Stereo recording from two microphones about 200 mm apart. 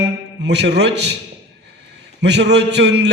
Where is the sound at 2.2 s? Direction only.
60° right (ahead or behind).